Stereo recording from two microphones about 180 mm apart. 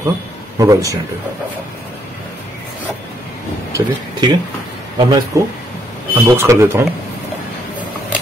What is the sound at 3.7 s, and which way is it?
Speech, 25° right (ahead or behind).